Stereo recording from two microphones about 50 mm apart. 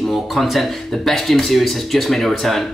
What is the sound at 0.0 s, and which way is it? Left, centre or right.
Speech, centre.